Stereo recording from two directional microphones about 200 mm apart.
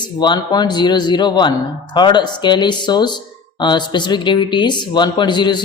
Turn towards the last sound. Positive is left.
turn(degrees=20)  # may be behind; listen again after turning